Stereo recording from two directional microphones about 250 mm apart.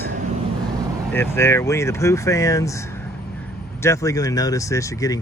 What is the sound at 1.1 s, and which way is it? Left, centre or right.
Speech, centre.